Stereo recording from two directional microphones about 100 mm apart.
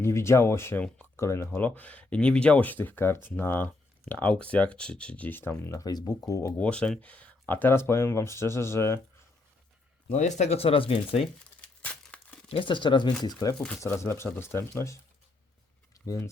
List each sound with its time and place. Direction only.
0.0 s speech: 25° left (ahead or behind)
1.2 s speech: 30° left (ahead or behind)
1.5 s speech: 15° left (ahead or behind)
5.8 s speech: 40° left (ahead or behind)
6.6 s speech: 10° left (ahead or behind); by 9.0 s 30° left (ahead or behind)
10.5 s speech: 75° left (ahead or behind)
11.6 s tearing: 15° left (ahead or behind)
12.5 s speech: 60° left (ahead or behind)
13.2 s speech: 40° left (ahead or behind)
13.8 s speech: 25° left (ahead or behind)
16.0 s speech: 30° left (ahead or behind)